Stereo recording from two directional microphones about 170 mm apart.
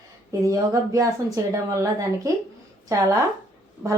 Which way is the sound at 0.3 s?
20° right (ahead or behind).